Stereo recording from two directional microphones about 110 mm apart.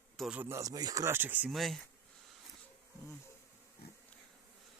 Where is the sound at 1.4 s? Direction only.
Centre (ahead or behind).